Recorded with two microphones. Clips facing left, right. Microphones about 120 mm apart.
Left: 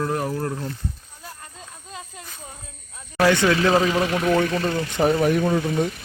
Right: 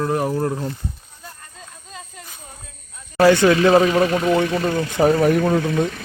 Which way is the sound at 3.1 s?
10° right (ahead or behind).